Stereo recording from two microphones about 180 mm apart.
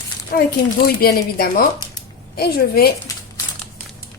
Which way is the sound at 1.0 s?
55° left (ahead or behind).